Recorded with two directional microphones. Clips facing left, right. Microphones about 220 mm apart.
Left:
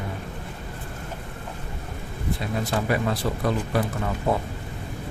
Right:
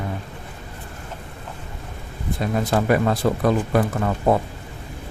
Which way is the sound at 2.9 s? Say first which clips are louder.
Right 6 dB; 55° right (ahead or behind).